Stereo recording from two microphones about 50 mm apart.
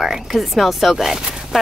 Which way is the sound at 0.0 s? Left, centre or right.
Centre.